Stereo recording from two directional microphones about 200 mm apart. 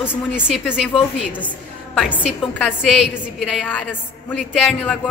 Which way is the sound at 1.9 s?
Centre (ahead or behind).